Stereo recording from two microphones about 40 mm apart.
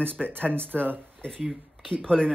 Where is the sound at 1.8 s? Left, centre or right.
Centre.